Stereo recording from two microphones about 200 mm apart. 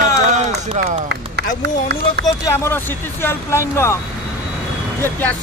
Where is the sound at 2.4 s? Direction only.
10° left (ahead or behind).